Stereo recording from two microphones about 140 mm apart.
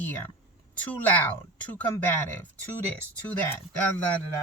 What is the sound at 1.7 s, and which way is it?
Speech, 10° left (ahead or behind).